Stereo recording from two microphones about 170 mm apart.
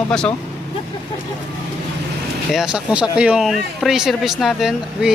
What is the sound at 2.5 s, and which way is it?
Speech, 5° right (ahead or behind).